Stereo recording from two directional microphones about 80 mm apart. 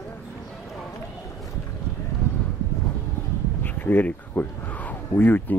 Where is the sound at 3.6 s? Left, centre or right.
Left.